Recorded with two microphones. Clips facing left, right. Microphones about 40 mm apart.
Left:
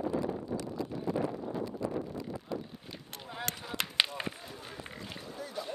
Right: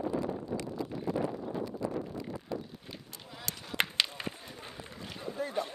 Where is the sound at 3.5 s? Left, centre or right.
Left.